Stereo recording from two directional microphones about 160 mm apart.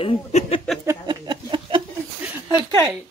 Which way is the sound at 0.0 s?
40° left (ahead or behind).